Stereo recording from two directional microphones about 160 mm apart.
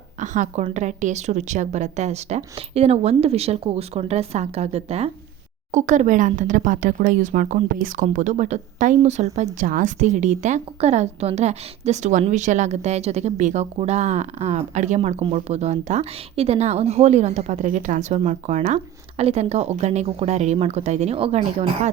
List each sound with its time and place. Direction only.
0.2 s a woman's voice: 50° right (ahead or behind)